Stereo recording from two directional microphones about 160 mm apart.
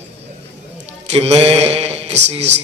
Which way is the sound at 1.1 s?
40° right (ahead or behind).